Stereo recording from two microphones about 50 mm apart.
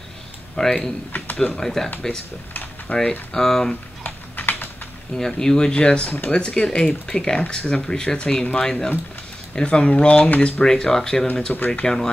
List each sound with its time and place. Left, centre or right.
0.6 s speech: centre
2.9 s speech: centre
4.0 s typing: left
5.1 s speech: centre
10.6 s speech: centre
11.5 s speech: left
11.8 s speech: centre